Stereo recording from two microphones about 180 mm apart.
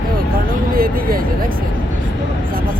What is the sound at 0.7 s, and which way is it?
Speech, 55° right (ahead or behind).